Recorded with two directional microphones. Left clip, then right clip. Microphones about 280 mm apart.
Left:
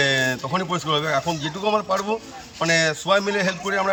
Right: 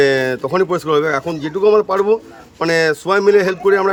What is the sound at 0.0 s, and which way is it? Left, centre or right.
Speech, centre.